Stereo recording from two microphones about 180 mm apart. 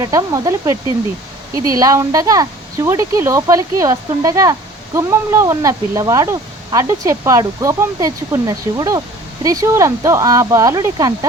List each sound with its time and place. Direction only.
0.0 s speech: 20° right (ahead or behind)